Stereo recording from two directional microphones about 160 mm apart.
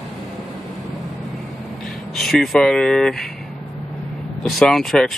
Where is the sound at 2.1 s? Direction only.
Centre (ahead or behind).